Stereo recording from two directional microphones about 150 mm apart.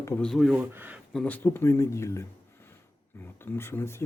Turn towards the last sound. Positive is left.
turn(degrees=15)  # may be behind; listen again after turning